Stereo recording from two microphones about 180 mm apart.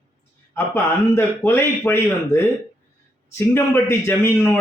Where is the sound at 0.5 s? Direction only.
15° left (ahead or behind).